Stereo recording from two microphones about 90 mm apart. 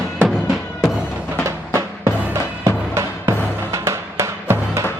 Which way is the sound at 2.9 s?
35° right (ahead or behind).